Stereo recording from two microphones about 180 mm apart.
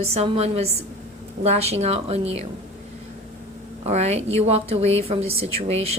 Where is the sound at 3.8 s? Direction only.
40° right (ahead or behind).